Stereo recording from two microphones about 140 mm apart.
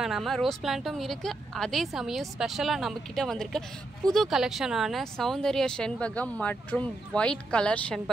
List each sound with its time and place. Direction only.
0.0 s speech: centre (ahead or behind)